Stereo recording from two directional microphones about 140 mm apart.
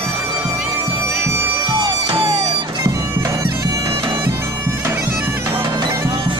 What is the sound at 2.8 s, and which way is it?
Bagpipes, 25° right (ahead or behind).